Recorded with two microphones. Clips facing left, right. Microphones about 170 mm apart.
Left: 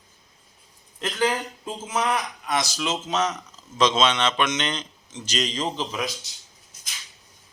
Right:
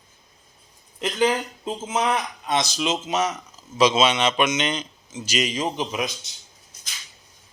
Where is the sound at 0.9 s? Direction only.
20° right (ahead or behind).